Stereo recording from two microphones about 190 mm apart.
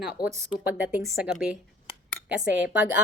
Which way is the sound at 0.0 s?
5° right (ahead or behind).